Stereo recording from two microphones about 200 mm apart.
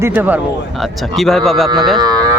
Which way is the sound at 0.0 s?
10° right (ahead or behind).